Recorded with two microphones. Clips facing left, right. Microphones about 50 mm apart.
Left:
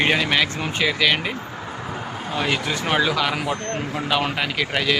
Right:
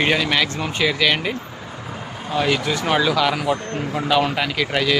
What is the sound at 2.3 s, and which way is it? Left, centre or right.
Speech, centre.